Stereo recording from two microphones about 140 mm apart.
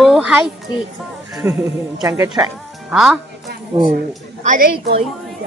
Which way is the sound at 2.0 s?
25° right (ahead or behind).